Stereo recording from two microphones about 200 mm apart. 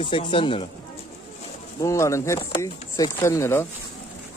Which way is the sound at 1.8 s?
15° left (ahead or behind).